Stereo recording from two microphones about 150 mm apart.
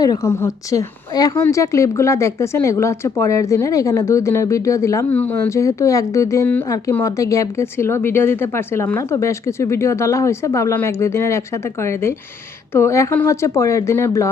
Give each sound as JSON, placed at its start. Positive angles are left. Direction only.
{"t": 0.0, "sound": "a woman's voice", "side_deg": 20}